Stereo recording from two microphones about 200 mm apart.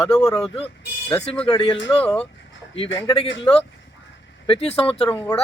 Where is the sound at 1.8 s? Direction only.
10° left (ahead or behind).